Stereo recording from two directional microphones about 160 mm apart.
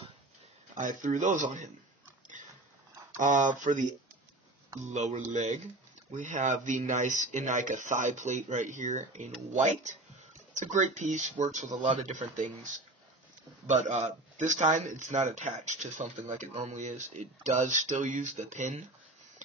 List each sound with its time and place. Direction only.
0.7 s speech: 55° right (ahead or behind)
3.2 s speech: 50° right (ahead or behind)
4.9 s speech: 50° right (ahead or behind)